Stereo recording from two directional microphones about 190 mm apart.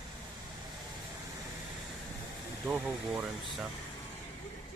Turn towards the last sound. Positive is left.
turn(degrees=-5)  # may be behind; listen again after turning